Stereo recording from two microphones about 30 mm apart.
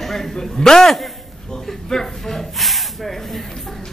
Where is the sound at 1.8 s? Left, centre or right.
Centre.